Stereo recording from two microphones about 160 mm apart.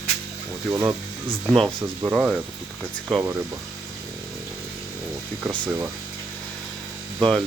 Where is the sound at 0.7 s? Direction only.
20° right (ahead or behind).